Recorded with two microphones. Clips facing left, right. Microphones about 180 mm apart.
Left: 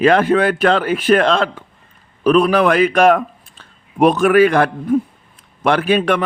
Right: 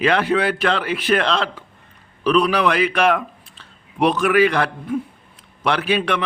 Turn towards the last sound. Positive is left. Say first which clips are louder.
# left 5 dB
turn(degrees=50)  # may be behind; listen again after turning